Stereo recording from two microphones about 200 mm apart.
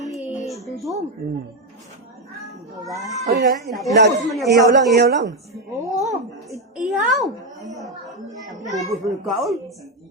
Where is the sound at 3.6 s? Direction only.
Centre (ahead or behind).